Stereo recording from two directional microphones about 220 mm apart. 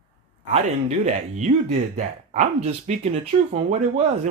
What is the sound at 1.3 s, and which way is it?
Speech, 30° right (ahead or behind).